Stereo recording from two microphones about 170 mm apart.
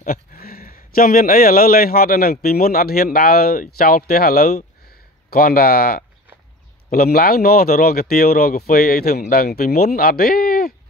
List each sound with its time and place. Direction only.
0.0 s speech: 55° left (ahead or behind)
4.8 s a sound: 60° left (ahead or behind)
6.9 s speech: 60° left (ahead or behind)